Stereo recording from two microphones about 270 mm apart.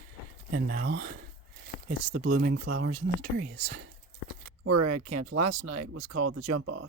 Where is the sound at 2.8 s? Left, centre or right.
Right.